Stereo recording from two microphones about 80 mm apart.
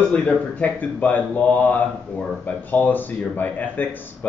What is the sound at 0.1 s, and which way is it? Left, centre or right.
A man's voice, centre.